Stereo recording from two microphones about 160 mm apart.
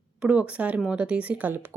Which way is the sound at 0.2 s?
5° right (ahead or behind).